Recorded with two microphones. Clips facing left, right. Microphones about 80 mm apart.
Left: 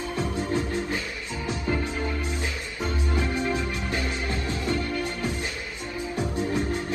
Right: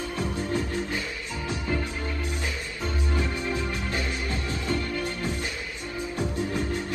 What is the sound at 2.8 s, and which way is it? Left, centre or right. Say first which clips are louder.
Music: left 2 dB; left.